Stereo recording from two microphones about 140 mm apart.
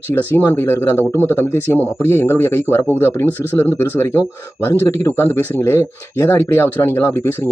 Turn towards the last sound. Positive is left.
turn(degrees=20)  # may be behind; listen again after turning